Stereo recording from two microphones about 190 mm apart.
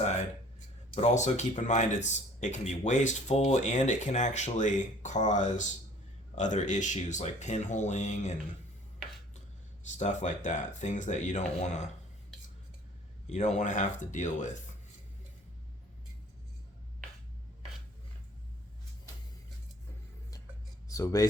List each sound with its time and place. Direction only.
0.9 s speech: 35° left (ahead or behind)
10.0 s speech: 40° left (ahead or behind)
13.3 s speech: 40° left (ahead or behind)
20.8 s a sound: 15° left (ahead or behind)